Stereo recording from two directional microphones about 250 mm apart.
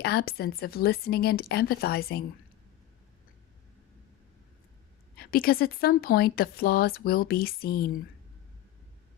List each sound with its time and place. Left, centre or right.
0.0 s speech: left
5.1 s speech: left